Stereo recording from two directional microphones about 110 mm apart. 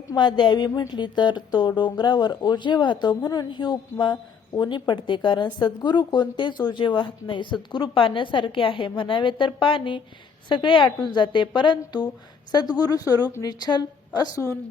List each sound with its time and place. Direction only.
0.1 s a woman's voice: 45° left (ahead or behind)